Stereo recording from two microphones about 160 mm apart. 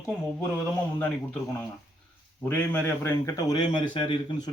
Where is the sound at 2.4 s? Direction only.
10° left (ahead or behind); by 4.5 s 30° left (ahead or behind).